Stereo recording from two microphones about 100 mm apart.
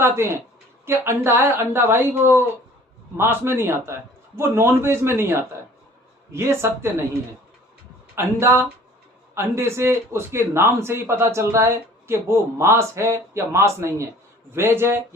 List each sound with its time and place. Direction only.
0.0 s a man's voice: 25° right (ahead or behind)
8.1 s a man's voice: 25° right (ahead or behind)